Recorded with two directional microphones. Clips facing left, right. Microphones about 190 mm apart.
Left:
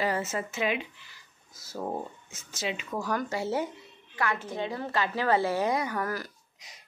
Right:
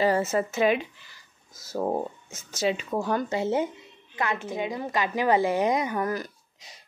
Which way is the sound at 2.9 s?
25° right (ahead or behind).